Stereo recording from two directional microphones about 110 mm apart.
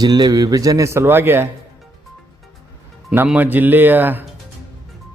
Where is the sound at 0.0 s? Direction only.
40° right (ahead or behind); by 1.5 s 20° right (ahead or behind).